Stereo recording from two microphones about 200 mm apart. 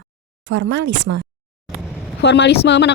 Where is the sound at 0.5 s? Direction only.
60° right (ahead or behind).